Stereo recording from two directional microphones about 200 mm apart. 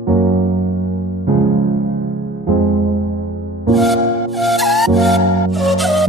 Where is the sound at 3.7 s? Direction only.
Centre (ahead or behind).